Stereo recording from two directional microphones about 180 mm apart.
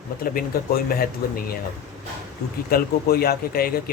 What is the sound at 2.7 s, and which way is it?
Speech, 55° left (ahead or behind).